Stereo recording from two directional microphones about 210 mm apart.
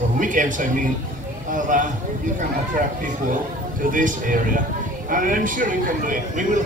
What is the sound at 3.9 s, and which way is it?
A man's voice, 40° right (ahead or behind).